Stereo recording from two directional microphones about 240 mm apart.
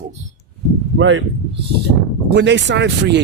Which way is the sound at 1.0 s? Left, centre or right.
Right.